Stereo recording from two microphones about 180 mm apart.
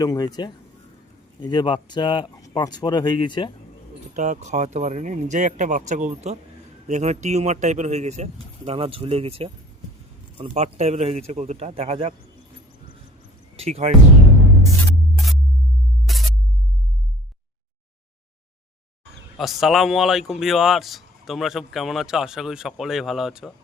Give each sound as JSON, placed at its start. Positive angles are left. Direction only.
{"t": 0.0, "sound": "speech", "side_deg": 20}
{"t": 4.1, "sound": "speech", "side_deg": -45}
{"t": 13.6, "sound": "speech", "side_deg": -35}
{"t": 16.1, "sound": "music", "side_deg": 0}
{"t": 19.4, "sound": "speech", "side_deg": 0}